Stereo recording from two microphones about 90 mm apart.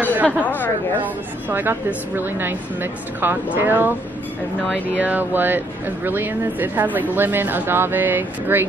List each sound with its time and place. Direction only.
0.0 s chatter: 15° right (ahead or behind)
0.4 s speech: 20° left (ahead or behind)
1.0 s speech: 20° right (ahead or behind)
4.9 s speech: 20° right (ahead or behind)